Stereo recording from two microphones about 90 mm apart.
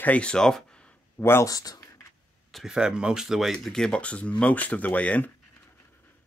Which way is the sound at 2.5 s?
Centre (ahead or behind).